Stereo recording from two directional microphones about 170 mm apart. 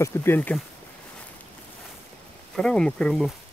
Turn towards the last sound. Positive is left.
turn(degrees=0)  # may be behind; listen again after turning